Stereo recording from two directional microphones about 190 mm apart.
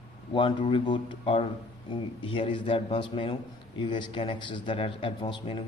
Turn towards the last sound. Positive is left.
turn(degrees=25)  # may be behind; listen again after turning